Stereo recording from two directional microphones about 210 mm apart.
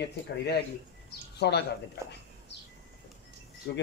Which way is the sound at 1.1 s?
50° left (ahead or behind).